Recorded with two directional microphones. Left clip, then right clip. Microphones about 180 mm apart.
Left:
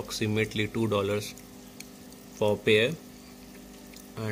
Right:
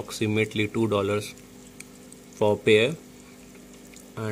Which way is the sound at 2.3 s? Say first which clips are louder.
Right 4 dB; 15° right (ahead or behind).